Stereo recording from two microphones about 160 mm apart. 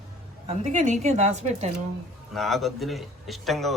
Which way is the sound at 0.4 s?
50° right (ahead or behind).